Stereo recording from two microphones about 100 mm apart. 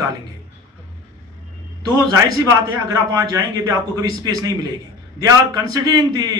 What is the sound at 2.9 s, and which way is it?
A man's voice, 40° right (ahead or behind).